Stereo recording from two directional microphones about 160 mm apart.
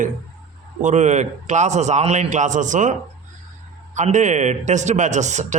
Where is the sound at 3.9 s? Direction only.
50° right (ahead or behind).